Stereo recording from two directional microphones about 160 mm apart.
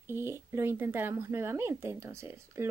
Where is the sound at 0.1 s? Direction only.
15° right (ahead or behind).